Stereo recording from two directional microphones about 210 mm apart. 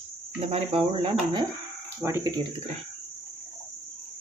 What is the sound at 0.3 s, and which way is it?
Speech, 25° right (ahead or behind).